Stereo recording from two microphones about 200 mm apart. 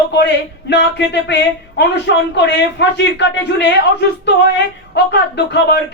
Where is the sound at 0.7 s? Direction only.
60° left (ahead or behind).